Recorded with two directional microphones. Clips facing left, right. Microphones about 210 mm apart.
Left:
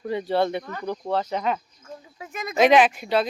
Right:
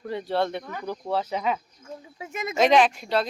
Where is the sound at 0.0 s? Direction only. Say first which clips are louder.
Left 3 dB; centre (ahead or behind).